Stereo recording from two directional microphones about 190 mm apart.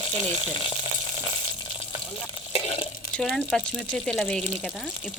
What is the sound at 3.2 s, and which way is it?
Stir, 5° left (ahead or behind).